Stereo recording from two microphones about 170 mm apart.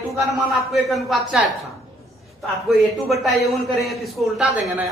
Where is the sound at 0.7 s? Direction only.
Centre (ahead or behind).